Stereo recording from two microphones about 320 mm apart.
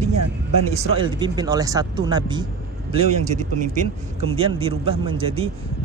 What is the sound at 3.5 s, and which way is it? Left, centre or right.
A man's voice, right.